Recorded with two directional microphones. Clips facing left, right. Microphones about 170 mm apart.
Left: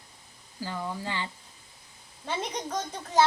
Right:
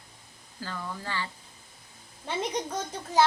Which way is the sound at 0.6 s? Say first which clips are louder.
Left 3 dB; 15° left (ahead or behind).